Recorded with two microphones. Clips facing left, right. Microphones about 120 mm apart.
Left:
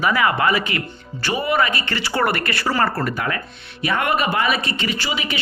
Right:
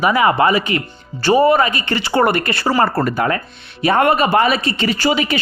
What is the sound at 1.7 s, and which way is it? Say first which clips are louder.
A woman's voice: right 5 dB; 20° right (ahead or behind).